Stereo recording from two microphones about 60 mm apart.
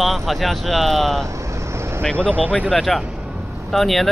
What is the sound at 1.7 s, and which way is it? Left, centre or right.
Vehicle, right.